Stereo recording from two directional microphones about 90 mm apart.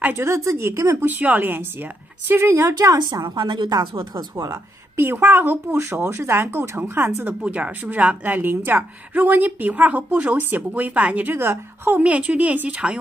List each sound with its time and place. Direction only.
0.0 s a woman's voice: 25° right (ahead or behind)
1.0 s a woman's voice: 20° right (ahead or behind)
3.1 s speech: 55° right (ahead or behind)
4.5 s a woman's voice: 25° right (ahead or behind)